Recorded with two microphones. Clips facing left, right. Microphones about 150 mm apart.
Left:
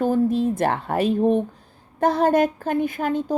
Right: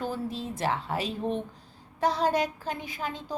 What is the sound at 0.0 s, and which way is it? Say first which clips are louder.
Speech: left 13 dB; 55° left (ahead or behind).